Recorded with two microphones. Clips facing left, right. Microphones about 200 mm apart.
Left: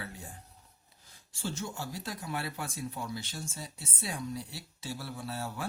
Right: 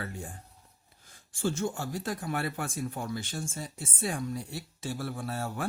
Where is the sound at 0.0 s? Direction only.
50° right (ahead or behind).